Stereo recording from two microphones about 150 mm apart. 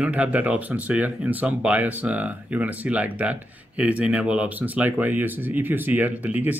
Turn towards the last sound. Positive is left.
turn(degrees=-10)  # may be behind; listen again after turning